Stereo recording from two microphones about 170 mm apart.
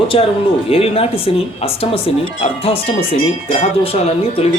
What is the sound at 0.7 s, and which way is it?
Speech, 35° left (ahead or behind).